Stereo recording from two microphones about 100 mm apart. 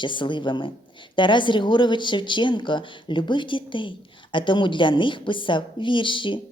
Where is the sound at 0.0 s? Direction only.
55° left (ahead or behind).